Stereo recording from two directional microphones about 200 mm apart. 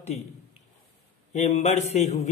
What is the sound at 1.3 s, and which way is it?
Speech, 35° left (ahead or behind).